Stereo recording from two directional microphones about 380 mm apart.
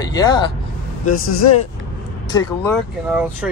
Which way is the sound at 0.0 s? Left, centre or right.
Centre.